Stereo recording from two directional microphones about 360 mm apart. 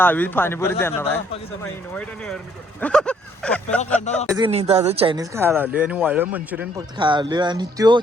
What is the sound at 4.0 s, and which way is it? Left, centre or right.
Speech, centre.